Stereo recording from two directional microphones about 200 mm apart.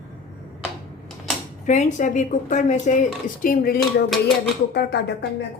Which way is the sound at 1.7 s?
35° left (ahead or behind).